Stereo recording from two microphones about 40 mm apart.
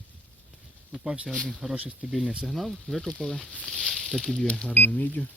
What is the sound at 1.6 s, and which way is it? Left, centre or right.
Speech, centre.